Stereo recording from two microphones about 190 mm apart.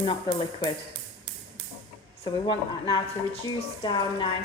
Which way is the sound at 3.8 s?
25° left (ahead or behind).